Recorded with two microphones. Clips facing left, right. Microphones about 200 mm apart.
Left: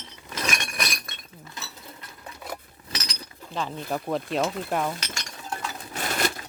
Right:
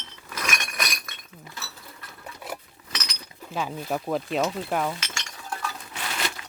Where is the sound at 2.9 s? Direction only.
30° left (ahead or behind).